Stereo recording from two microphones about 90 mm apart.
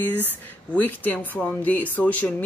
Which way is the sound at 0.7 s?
20° left (ahead or behind).